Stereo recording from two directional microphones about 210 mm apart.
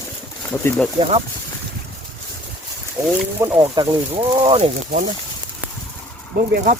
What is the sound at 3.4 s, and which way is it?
Speech, 15° right (ahead or behind).